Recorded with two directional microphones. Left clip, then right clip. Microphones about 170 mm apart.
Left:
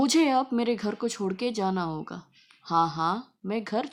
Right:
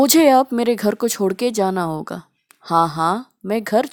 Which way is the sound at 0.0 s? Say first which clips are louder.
Right 11 dB; 50° right (ahead or behind).